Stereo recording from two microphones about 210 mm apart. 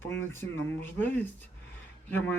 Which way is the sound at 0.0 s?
10° left (ahead or behind).